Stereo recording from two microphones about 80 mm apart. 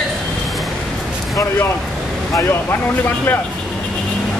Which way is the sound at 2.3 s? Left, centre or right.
Left.